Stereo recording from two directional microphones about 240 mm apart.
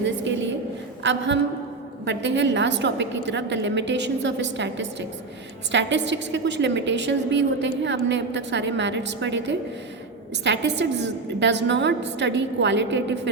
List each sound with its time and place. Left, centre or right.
0.0 s a woman's voice: right
2.0 s a woman's voice: right